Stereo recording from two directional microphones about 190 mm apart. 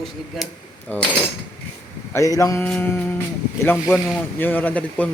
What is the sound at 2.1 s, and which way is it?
Speech, 15° left (ahead or behind).